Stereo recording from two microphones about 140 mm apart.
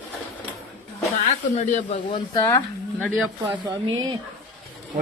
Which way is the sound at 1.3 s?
55° left (ahead or behind).